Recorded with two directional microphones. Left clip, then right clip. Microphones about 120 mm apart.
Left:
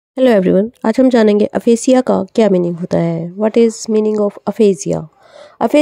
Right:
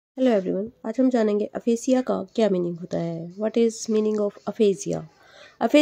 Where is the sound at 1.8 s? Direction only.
90° left.